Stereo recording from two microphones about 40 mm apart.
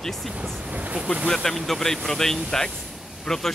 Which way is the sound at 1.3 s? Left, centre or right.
Centre.